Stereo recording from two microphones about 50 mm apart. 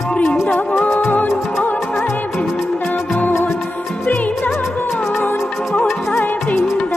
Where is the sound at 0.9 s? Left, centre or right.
Left.